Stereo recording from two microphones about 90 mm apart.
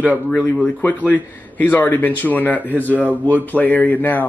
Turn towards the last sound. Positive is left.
turn(degrees=20)  # may be behind; listen again after turning